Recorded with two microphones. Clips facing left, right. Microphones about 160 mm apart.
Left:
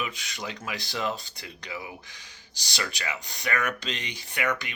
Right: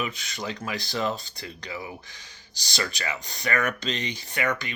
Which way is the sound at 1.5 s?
10° left (ahead or behind).